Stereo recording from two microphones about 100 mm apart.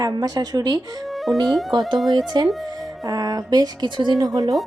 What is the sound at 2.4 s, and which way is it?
Speech, 50° right (ahead or behind).